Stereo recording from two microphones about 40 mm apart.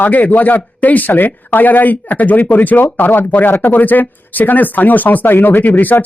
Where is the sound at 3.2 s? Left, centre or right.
Left.